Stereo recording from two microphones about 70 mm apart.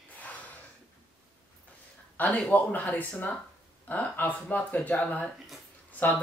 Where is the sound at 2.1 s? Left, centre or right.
Centre.